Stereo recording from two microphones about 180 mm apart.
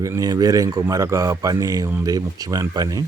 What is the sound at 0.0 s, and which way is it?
A man's voice, 20° right (ahead or behind).